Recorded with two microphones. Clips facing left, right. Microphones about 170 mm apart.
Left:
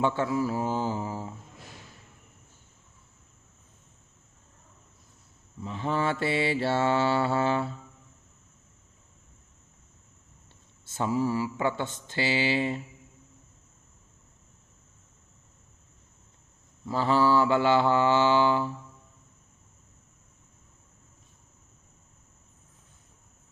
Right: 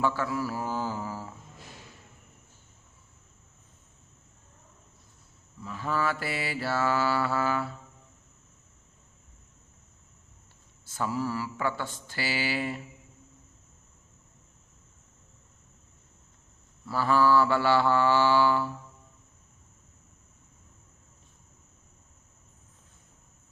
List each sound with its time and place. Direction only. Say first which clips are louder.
0.0 s mantra: left 3 dB; 25° left (ahead or behind)
5.5 s mantra: left 2 dB; 20° left (ahead or behind)
10.8 s mantra: left 4 dB; 25° left (ahead or behind)
16.8 s mantra: even; 20° left (ahead or behind)